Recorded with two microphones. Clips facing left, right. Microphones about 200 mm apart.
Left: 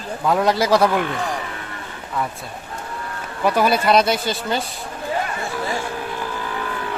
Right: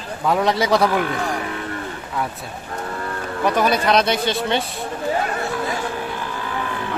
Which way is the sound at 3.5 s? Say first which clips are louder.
Left 1 dB; 5° left (ahead or behind).